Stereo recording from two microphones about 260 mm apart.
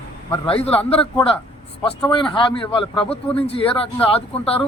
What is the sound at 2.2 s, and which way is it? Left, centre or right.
A man's voice, centre.